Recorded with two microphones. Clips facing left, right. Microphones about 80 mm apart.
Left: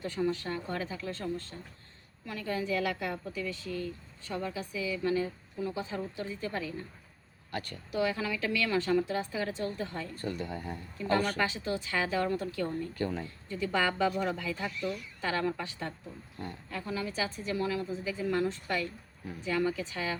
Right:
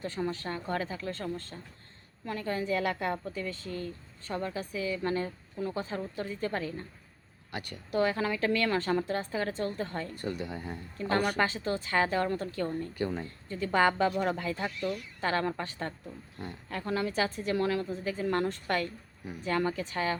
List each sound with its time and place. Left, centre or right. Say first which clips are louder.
0.0 s a woman's voice: left 2 dB; right
7.9 s a woman's voice: right 3 dB; right
10.2 s a woman's voice: even; centre
10.9 s a woman's voice: right 1 dB; right
12.6 s a woman's voice: right 1 dB; centre
13.5 s a woman's voice: right 4 dB; right
16.6 s a woman's voice: right 5 dB; right